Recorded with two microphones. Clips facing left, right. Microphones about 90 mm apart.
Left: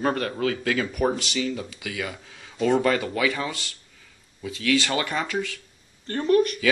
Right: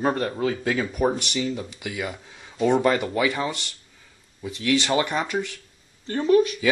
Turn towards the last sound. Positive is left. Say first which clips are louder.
# right 2 dB
turn(degrees=-10)  # may be behind; listen again after turning